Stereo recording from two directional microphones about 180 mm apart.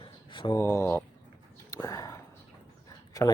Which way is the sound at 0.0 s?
25° left (ahead or behind).